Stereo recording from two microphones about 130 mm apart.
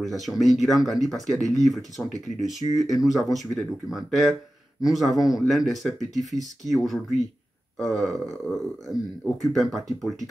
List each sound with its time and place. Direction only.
0.0 s speech: centre (ahead or behind)
2.1 s speech: 30° right (ahead or behind)
2.8 s speech: centre (ahead or behind)
6.1 s speech: 30° right (ahead or behind)
6.7 s speech: centre (ahead or behind)